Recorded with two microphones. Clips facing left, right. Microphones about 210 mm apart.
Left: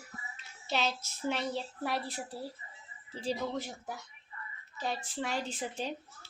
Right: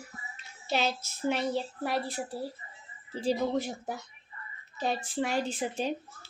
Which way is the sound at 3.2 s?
10° right (ahead or behind).